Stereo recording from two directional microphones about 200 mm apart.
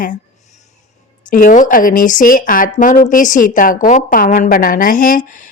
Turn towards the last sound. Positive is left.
turn(degrees=40)  # may be behind; listen again after turning